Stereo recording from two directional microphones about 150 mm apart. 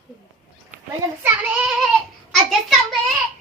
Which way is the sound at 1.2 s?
10° right (ahead or behind).